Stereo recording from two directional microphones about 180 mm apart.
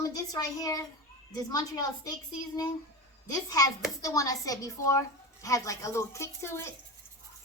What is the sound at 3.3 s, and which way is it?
A woman's voice, 20° left (ahead or behind).